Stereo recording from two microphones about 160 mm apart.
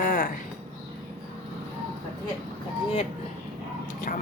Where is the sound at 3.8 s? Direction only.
55° left (ahead or behind).